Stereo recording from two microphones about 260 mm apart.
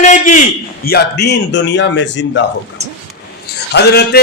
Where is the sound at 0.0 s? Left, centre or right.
Left.